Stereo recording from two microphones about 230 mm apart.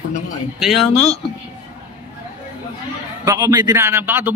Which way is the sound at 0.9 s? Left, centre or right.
Left.